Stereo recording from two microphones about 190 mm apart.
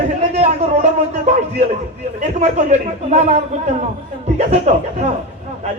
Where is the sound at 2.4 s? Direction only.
35° right (ahead or behind).